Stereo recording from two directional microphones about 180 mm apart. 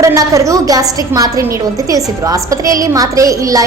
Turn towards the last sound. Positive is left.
turn(degrees=-20)  # may be behind; listen again after turning